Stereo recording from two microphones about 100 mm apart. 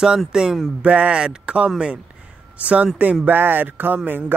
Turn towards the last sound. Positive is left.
turn(degrees=-20)  # may be behind; listen again after turning